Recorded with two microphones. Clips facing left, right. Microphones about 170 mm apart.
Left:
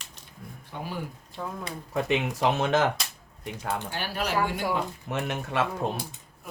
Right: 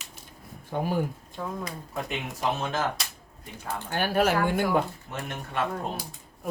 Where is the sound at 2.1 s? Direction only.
80° left.